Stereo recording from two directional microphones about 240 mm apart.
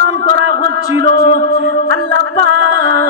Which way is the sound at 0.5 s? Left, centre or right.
Left.